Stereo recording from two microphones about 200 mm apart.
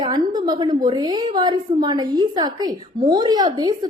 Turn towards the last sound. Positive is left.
turn(degrees=-20)  # may be behind; listen again after turning